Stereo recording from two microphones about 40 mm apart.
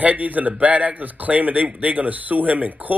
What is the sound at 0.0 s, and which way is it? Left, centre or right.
A man's voice, right.